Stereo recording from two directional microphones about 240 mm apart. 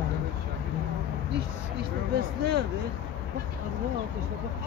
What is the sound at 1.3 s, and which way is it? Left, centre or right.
Speech, right.